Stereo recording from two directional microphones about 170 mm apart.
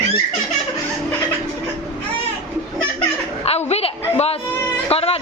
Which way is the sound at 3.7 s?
35° left (ahead or behind).